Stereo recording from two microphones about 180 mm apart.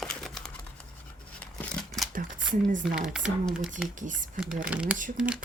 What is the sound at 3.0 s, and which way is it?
Speech, 5° right (ahead or behind).